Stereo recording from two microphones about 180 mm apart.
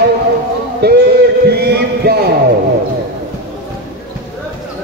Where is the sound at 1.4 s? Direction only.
60° right (ahead or behind).